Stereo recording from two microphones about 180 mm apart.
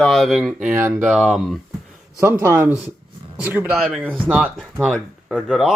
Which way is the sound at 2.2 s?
15° right (ahead or behind).